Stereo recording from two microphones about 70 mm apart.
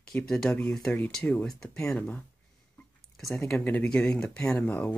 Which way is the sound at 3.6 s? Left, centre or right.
Left.